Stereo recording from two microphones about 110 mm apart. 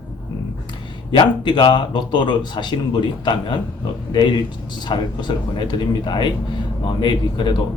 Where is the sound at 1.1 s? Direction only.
45° left (ahead or behind).